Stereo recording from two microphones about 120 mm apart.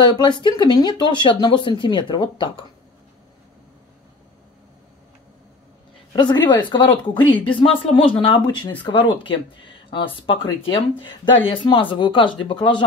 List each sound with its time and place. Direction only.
0.1 s speech: 40° left (ahead or behind)
6.1 s speech: 40° left (ahead or behind)